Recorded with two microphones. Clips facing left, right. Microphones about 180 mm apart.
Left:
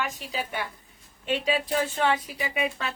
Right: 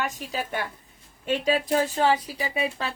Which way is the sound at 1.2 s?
45° right (ahead or behind).